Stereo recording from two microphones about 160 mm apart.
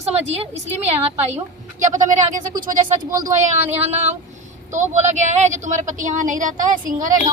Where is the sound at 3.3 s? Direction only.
45° right (ahead or behind).